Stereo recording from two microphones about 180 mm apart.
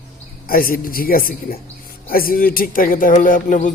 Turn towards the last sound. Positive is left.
turn(degrees=45)  # may be behind; listen again after turning